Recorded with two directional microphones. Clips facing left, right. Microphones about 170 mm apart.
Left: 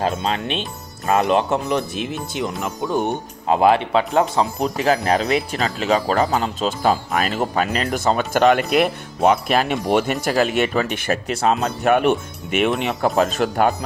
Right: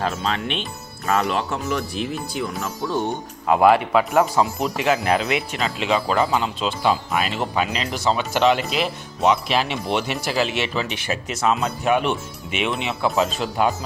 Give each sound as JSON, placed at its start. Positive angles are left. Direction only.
{"t": 0.0, "sound": "speech", "side_deg": 20}
{"t": 4.6, "sound": "speech", "side_deg": 35}
{"t": 11.4, "sound": "speech", "side_deg": 40}
{"t": 11.8, "sound": "speech", "side_deg": 50}